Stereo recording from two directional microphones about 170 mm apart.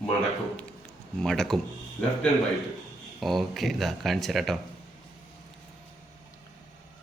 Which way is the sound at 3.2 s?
Centre (ahead or behind).